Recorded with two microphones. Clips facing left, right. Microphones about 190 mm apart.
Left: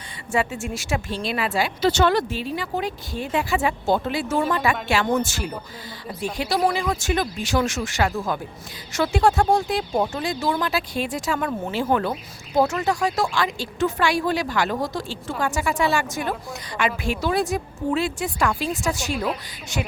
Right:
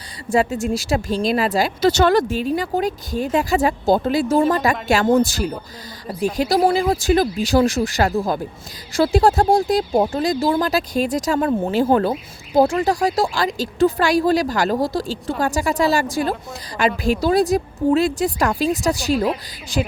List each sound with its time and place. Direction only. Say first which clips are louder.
0.3 s speech: right 6 dB; 40° right (ahead or behind)